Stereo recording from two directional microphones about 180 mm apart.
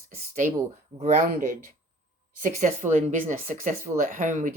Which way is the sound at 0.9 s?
45° right (ahead or behind).